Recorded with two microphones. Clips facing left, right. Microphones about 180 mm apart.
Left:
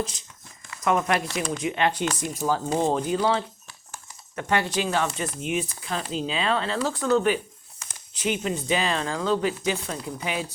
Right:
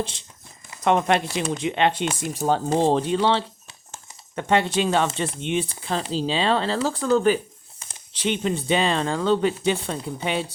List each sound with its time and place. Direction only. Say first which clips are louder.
0.0 s speech: right 1 dB; 30° right (ahead or behind)
2.4 s speech: right 3 dB; 45° right (ahead or behind)
3.2 s speech: right 2 dB; 25° right (ahead or behind)